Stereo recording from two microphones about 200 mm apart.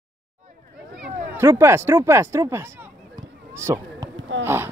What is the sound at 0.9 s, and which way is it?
Speech, 5° right (ahead or behind).